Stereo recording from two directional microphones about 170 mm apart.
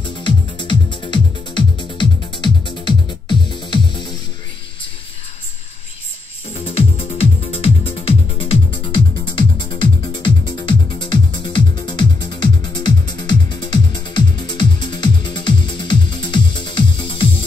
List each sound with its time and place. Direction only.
0.0 s music: 25° left (ahead or behind)
6.5 s music: 35° left (ahead or behind)